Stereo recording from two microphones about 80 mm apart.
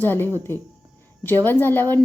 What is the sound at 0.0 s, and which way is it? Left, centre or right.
Speech, left.